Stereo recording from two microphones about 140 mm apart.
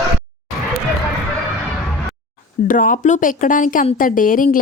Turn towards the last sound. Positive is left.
turn(degrees=80)